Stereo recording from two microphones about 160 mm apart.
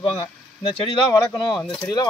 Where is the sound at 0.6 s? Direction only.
35° left (ahead or behind).